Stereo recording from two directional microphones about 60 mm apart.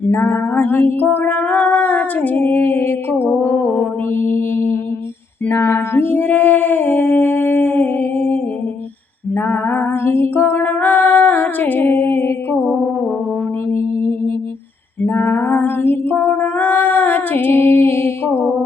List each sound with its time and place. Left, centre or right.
0.3 s a sound: left
3.4 s mantra: left
5.5 s female singing: left
13.7 s music: left
15.0 s female singing: left
16.2 s singing: left